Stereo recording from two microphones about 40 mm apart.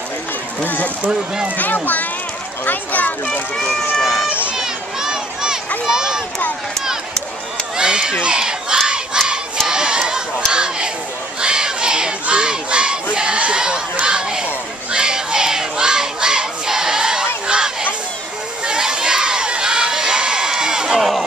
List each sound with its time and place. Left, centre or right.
0.7 s a child's voice: left
3.5 s speech: centre
4.0 s run: centre
4.3 s a sound: right
4.6 s a sound: centre
7.7 s crowd: centre
10.5 s a sound: right
11.4 s battle cry: right
14.0 s crowd: right